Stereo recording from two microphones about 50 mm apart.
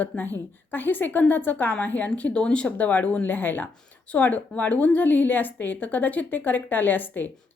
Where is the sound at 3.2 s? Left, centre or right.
Left.